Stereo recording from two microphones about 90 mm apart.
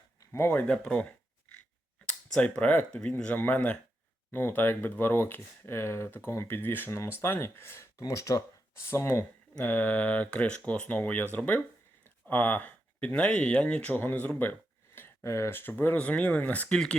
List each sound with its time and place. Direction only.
0.3 s speech: 25° left (ahead or behind)
0.7 s a sound: 10° left (ahead or behind)
2.0 s speech: 10° left (ahead or behind); by 9.2 s 30° left (ahead or behind)
9.6 s speech: 15° left (ahead or behind)